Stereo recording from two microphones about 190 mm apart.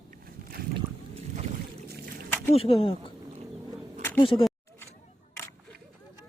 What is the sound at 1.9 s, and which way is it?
Splash, 55° right (ahead or behind).